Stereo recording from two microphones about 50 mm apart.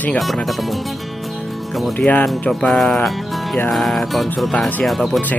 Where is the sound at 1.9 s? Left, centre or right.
Left.